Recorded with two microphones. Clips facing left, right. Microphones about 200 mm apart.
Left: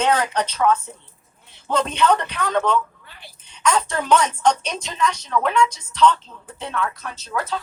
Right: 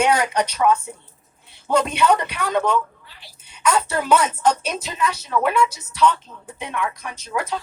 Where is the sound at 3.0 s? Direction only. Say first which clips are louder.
Left 3 dB; 55° left (ahead or behind).